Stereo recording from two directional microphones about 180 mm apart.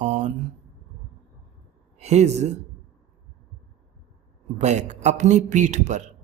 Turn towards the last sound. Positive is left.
turn(degrees=-40)  # may be behind; listen again after turning